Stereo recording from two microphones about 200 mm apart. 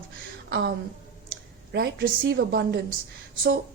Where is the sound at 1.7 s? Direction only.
50° right (ahead or behind).